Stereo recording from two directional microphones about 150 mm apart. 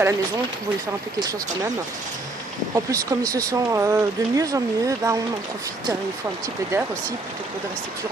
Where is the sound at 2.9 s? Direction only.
20° right (ahead or behind).